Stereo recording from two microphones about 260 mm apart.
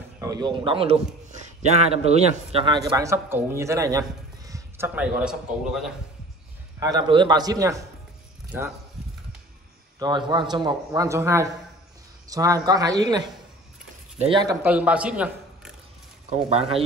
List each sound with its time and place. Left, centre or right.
0.2 s a man's voice: centre
6.8 s a man's voice: centre
9.9 s a man's voice: centre
14.4 s a man's voice: centre
16.3 s speech: right